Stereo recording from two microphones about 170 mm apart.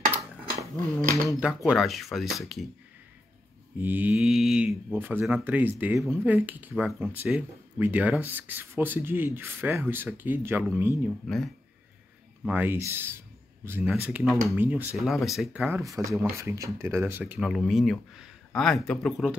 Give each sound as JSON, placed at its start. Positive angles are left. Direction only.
{"t": 0.1, "sound": "dishes", "side_deg": -10}
{"t": 1.3, "sound": "speech", "side_deg": 0}
{"t": 3.7, "sound": "speech", "side_deg": -10}
{"t": 11.2, "sound": "speech", "side_deg": 0}
{"t": 12.4, "sound": "speech", "side_deg": -10}
{"t": 15.0, "sound": "speech", "side_deg": 0}
{"t": 15.8, "sound": "speech", "side_deg": -20}